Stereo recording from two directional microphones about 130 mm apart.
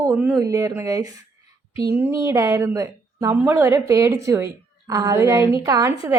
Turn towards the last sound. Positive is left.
turn(degrees=-25)  # may be behind; listen again after turning